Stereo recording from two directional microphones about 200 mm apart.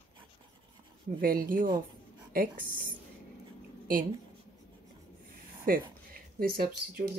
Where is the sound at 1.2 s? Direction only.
45° right (ahead or behind).